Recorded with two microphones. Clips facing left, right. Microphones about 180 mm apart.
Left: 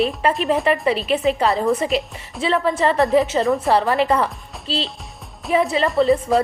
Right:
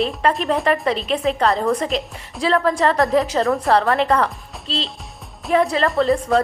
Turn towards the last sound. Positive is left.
turn(degrees=5)  # may be behind; listen again after turning